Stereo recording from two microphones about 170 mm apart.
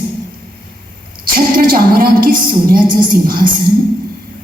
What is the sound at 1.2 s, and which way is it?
A woman's voice, 60° right (ahead or behind).